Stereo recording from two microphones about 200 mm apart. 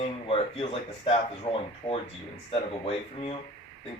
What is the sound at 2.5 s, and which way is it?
Speech, 30° left (ahead or behind).